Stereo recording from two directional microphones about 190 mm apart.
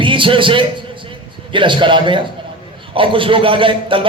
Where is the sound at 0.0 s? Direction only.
25° right (ahead or behind).